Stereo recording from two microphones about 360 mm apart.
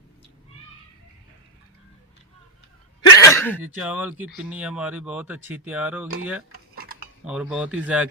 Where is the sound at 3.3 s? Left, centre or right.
Centre.